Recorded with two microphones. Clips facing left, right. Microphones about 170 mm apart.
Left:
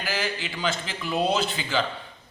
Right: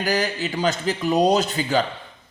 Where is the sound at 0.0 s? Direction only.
40° right (ahead or behind).